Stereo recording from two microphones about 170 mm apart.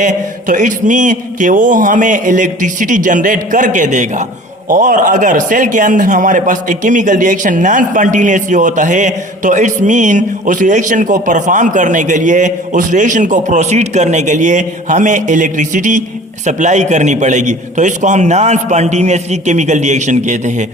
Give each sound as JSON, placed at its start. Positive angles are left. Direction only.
{"t": 0.0, "sound": "speech", "side_deg": -50}